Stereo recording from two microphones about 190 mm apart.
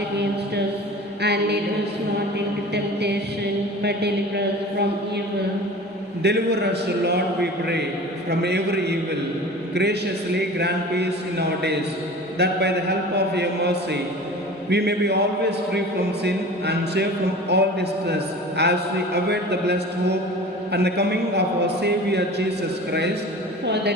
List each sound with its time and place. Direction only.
1.2 s chant: 60° right (ahead or behind)
2.7 s chant: 60° right (ahead or behind)
3.8 s a man's voice: 60° right (ahead or behind)
6.2 s a man's voice: 60° right (ahead or behind)